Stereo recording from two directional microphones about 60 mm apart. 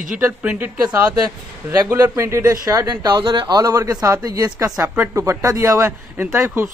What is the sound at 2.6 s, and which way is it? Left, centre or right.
A man's voice, right.